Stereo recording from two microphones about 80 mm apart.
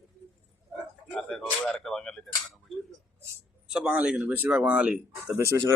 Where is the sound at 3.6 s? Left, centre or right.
Centre.